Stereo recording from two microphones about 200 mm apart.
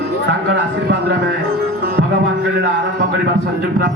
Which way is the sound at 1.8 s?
55° right (ahead or behind).